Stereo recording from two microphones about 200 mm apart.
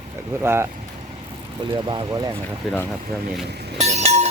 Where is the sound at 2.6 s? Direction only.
Centre (ahead or behind).